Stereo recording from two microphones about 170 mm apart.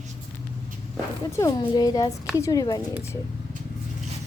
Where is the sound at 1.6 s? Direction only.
25° left (ahead or behind).